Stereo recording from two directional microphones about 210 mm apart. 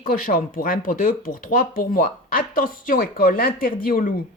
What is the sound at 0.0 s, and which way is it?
A woman's voice, 40° left (ahead or behind).